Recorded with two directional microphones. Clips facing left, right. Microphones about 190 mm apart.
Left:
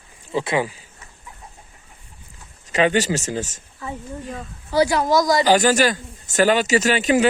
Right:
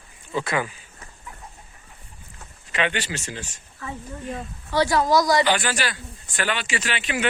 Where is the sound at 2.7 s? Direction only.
40° left (ahead or behind).